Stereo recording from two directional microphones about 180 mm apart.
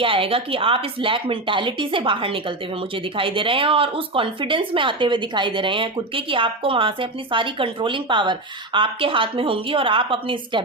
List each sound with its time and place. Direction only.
0.0 s speech: 30° right (ahead or behind)